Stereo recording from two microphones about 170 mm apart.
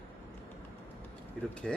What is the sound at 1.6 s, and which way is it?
Speech, centre (ahead or behind).